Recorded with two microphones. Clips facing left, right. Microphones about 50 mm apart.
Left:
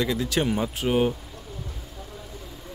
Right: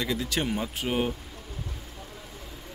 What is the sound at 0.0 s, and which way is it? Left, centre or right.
Speech, centre.